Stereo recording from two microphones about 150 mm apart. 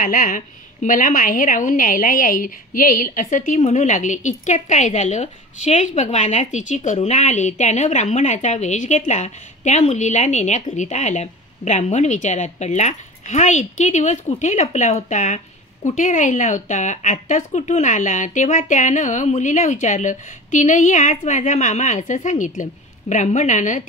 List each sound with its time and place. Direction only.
0.0 s a woman's voice: 65° left (ahead or behind)